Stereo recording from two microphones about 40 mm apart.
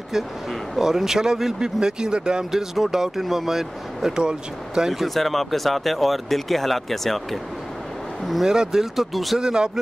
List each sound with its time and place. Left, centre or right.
0.7 s speech: centre
2.5 s speech: centre
4.1 s speech: right
4.8 s speech: centre
8.5 s speech: centre
8.9 s speech: centre
9.4 s speech: centre